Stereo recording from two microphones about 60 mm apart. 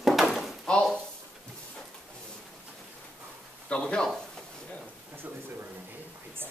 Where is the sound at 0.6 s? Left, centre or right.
Centre.